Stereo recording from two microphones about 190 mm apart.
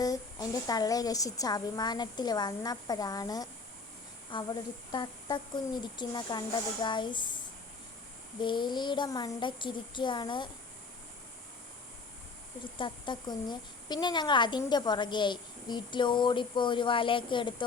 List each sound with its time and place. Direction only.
0.0 s a woman's voice: 20° left (ahead or behind)
8.4 s a woman's voice: 25° left (ahead or behind)
12.8 s a woman's voice: 25° left (ahead or behind)